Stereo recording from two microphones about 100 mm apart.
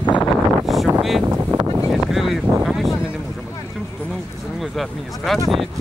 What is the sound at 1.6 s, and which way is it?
Vehicle, 60° right (ahead or behind).